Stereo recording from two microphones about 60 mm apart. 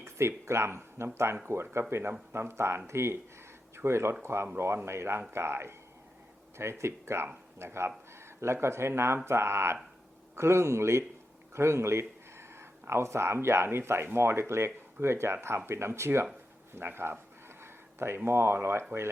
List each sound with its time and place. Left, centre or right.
0.0 s speech: right
11.5 s a sound: right
12.9 s speech: right